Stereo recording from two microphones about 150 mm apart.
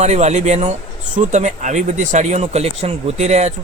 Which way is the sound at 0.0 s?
50° right (ahead or behind).